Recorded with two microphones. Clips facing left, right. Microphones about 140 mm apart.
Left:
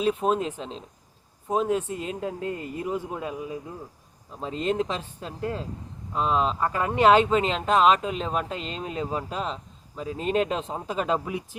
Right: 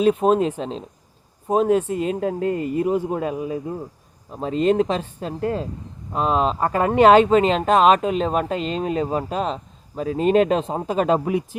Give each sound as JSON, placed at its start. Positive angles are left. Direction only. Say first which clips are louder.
{"t": 0.3, "sound": "speech", "louder": "right 7 dB", "side_deg": -60}
{"t": 2.8, "sound": "a man's voice", "louder": "right 7 dB", "side_deg": -15}
{"t": 3.2, "sound": "speech", "louder": "right 7 dB", "side_deg": -55}
{"t": 6.6, "sound": "speech", "louder": "right 6 dB", "side_deg": -50}